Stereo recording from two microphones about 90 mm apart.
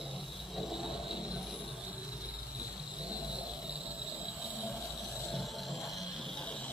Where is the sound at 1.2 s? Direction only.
10° right (ahead or behind).